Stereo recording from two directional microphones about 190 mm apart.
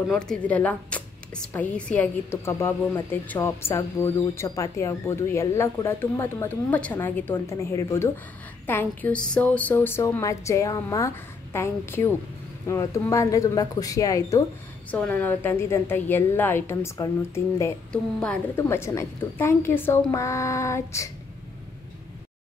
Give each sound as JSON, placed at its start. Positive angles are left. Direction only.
{"t": 0.1, "sound": "a woman's voice", "side_deg": 5}
{"t": 14.9, "sound": "a woman's voice", "side_deg": 5}